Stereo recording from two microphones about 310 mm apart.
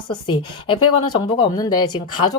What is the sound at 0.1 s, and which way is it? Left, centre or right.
Speech, centre.